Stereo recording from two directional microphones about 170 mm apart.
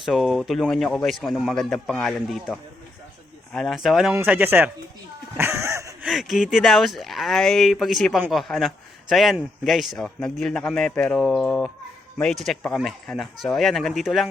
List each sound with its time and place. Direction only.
0.0 s a man's voice: centre (ahead or behind)
5.4 s a sound: 15° right (ahead or behind)
6.1 s a man's voice: centre (ahead or behind)